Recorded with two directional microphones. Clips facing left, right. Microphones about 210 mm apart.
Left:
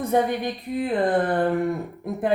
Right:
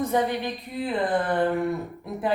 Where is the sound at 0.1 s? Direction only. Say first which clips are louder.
Left 4 dB; 55° left (ahead or behind).